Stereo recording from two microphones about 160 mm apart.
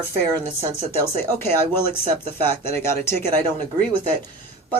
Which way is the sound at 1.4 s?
15° left (ahead or behind).